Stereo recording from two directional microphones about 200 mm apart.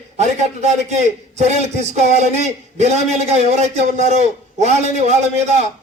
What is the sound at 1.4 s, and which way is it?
A man's voice, 35° right (ahead or behind).